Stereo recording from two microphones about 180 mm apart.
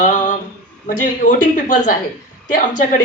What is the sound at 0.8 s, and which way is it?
Speech, 45° left (ahead or behind).